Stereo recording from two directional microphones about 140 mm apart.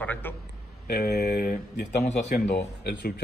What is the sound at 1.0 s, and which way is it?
Speech, 75° left (ahead or behind).